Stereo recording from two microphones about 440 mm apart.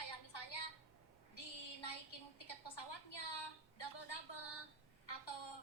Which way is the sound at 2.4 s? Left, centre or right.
Left.